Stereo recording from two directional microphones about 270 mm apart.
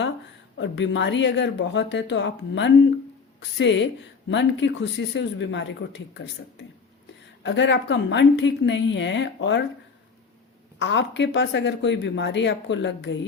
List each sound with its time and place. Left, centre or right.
0.5 s speech: left
10.8 s speech: left